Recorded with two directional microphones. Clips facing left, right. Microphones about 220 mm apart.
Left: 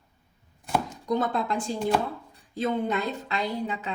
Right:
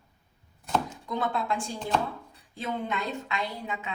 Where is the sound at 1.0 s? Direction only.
40° left (ahead or behind).